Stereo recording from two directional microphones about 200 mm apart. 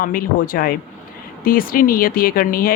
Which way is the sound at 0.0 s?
45° left (ahead or behind).